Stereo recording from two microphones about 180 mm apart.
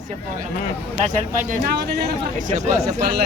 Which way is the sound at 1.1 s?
45° right (ahead or behind).